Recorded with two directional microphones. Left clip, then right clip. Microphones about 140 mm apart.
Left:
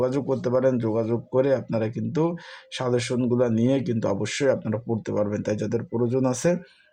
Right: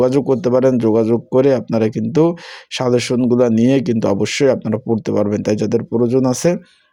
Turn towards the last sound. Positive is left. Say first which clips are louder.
# right 8 dB
turn(degrees=-35)  # may be behind; listen again after turning